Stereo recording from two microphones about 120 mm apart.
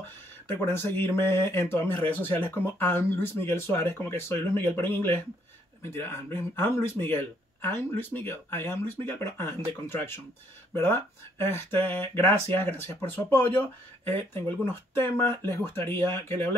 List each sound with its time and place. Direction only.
0.7 s speech: 20° left (ahead or behind)